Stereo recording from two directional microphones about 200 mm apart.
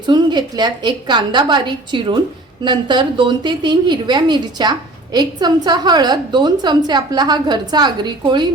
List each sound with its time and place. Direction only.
0.0 s a woman's voice: 20° right (ahead or behind)